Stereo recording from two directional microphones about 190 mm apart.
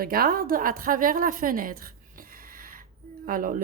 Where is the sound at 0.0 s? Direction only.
50° right (ahead or behind).